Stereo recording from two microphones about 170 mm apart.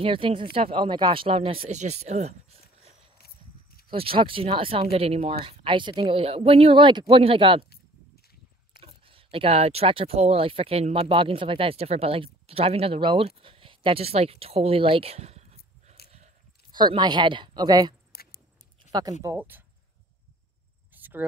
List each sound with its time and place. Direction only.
0.0 s speech: 30° right (ahead or behind)
8.8 s speech: 35° right (ahead or behind)
16.7 s speech: 25° right (ahead or behind)
18.1 s a sound: 65° left (ahead or behind)
18.9 s speech: 25° right (ahead or behind)
19.2 s speech: 10° right (ahead or behind)
20.9 s cricket: 10° right (ahead or behind)